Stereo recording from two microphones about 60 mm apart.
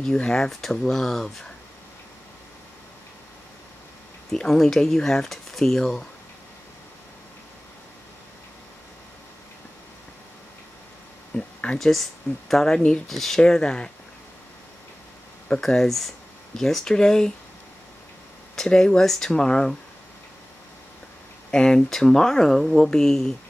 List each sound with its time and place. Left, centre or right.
0.0 s speech: centre
4.3 s speech: centre
11.3 s a sound: centre
11.9 s speech: centre
15.4 s speech: centre
18.6 s speech: centre
21.5 s speech: centre